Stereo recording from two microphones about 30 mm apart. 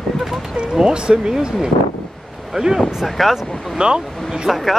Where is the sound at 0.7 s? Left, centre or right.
Centre.